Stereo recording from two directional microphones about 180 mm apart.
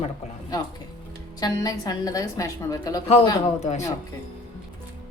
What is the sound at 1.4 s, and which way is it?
A woman's voice, 20° left (ahead or behind).